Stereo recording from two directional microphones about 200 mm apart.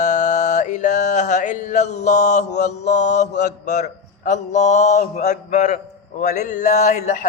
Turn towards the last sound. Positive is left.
turn(degrees=35)  # may be behind; listen again after turning